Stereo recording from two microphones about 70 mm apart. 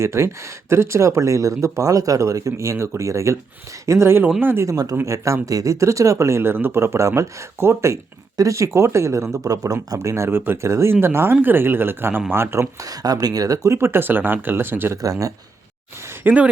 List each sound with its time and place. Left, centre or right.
0.0 s speech: right
4.4 s speech: right
5.0 s speech: right
10.2 s speech: right
12.8 s speech: right
15.0 s speech: right
16.2 s speech: centre